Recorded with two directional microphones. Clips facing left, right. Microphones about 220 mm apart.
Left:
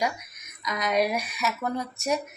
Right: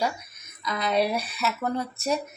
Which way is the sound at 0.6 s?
10° left (ahead or behind).